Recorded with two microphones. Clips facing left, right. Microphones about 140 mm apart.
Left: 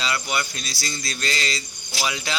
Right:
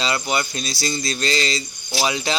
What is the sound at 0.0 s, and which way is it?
A man's voice, 25° right (ahead or behind).